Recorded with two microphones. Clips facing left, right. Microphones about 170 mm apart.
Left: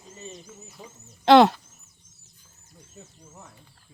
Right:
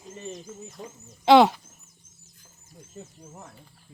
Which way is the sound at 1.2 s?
5° right (ahead or behind).